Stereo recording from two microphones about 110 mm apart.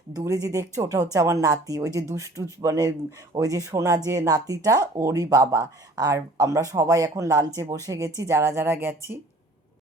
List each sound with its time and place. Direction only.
0.4 s speech: 30° right (ahead or behind)